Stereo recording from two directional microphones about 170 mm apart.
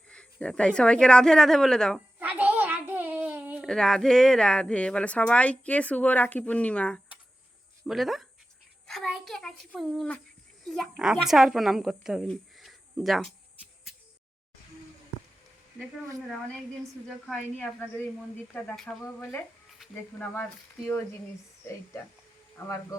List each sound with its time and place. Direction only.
0.1 s a woman's voice: 5° left (ahead or behind)
2.1 s a sound: 10° right (ahead or behind)
3.7 s a woman's voice: 5° left (ahead or behind)
17.2 s speech: 5° left (ahead or behind)
22.5 s a man's voice: 20° left (ahead or behind)